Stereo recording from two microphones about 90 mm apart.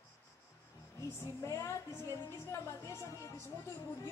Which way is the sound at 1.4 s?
35° left (ahead or behind).